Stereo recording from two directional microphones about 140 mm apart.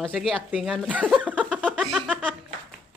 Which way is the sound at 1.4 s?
5° left (ahead or behind).